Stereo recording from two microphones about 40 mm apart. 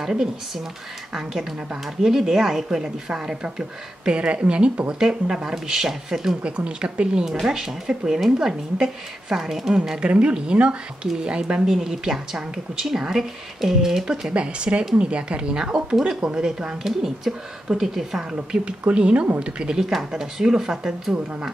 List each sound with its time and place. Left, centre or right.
0.0 s speech: centre
6.4 s speech: right
7.4 s speech: centre
10.0 s speech: right; by 14.0 s centre
14.3 s speech: right; by 18.2 s centre
18.3 s speech: right
19.8 s speech: centre